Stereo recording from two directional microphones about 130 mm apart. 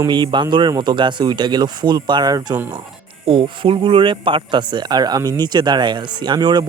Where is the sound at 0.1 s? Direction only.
35° right (ahead or behind).